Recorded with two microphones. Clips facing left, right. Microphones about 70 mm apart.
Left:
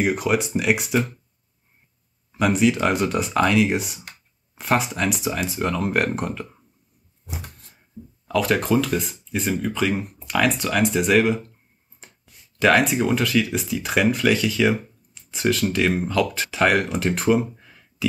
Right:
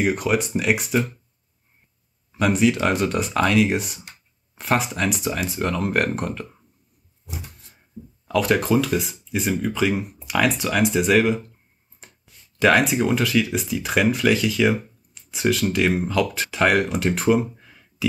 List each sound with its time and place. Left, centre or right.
0.0 s speech: centre
2.3 s speech: centre
7.3 s a sound: left
8.3 s speech: centre